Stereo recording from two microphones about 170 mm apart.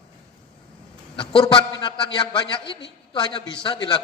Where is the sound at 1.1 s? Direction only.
30° left (ahead or behind).